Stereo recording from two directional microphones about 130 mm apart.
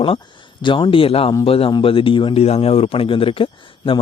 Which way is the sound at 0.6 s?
40° left (ahead or behind).